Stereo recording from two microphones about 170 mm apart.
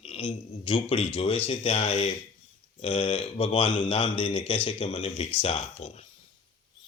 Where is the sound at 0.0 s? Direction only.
35° left (ahead or behind).